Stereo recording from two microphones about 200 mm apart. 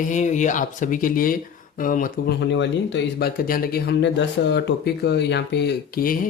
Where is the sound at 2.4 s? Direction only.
60° left (ahead or behind).